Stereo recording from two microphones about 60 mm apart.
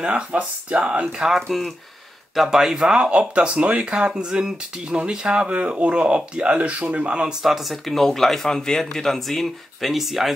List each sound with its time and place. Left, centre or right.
0.0 s speech: right
1.0 s speech: centre
7.4 s speech: centre